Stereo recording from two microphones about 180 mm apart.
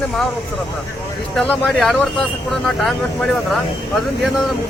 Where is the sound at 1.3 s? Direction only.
5° left (ahead or behind).